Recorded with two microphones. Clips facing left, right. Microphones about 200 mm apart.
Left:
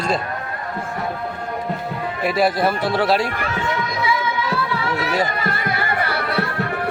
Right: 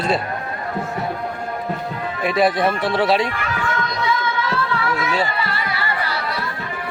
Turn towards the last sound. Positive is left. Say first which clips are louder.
# left 5 dB
turn(degrees=60)  # may be behind; listen again after turning